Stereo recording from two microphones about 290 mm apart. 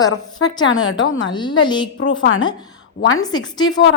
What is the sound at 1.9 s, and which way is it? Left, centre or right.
Speech, left.